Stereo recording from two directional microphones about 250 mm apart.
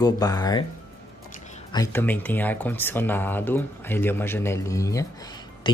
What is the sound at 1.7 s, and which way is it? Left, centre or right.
Speech, centre.